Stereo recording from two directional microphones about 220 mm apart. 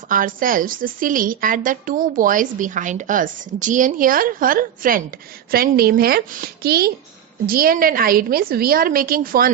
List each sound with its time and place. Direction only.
0.1 s a woman's voice: 40° right (ahead or behind)